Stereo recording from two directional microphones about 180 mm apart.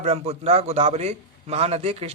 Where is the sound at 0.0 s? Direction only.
35° right (ahead or behind).